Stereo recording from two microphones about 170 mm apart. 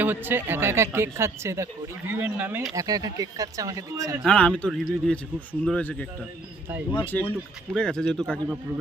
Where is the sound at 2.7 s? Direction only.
20° right (ahead or behind).